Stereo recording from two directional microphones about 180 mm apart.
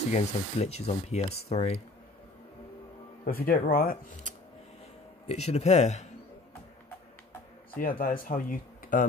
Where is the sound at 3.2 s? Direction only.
55° left (ahead or behind).